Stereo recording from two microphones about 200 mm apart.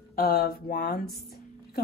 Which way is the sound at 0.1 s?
50° left (ahead or behind).